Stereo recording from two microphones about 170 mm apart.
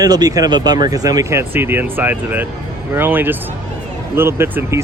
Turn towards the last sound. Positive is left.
turn(degrees=-15)  # may be behind; listen again after turning